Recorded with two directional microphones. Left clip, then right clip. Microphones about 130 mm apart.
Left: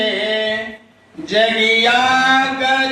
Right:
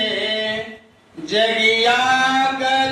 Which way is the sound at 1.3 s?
20° left (ahead or behind).